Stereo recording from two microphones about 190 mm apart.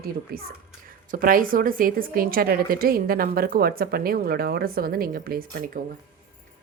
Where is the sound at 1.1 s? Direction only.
45° right (ahead or behind).